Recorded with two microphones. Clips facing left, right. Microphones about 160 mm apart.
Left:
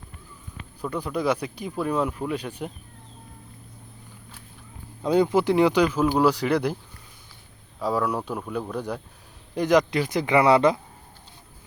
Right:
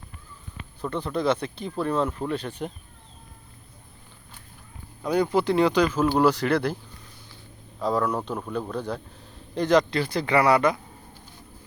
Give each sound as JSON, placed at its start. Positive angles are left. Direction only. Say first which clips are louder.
{"t": 0.8, "sound": "speech", "louder": "even", "side_deg": 10}
{"t": 5.0, "sound": "speech", "louder": "left 2 dB", "side_deg": 20}
{"t": 7.8, "sound": "speech", "louder": "even", "side_deg": 10}